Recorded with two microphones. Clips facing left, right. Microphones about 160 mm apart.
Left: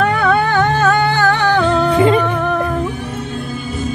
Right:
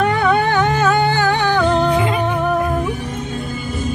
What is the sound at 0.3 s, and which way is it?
Music, 20° right (ahead or behind).